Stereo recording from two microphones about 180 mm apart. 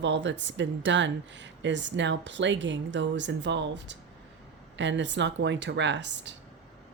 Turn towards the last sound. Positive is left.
turn(degrees=-80)